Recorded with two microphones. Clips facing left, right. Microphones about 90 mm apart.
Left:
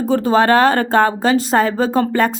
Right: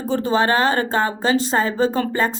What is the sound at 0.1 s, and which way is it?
Speech, 50° left (ahead or behind).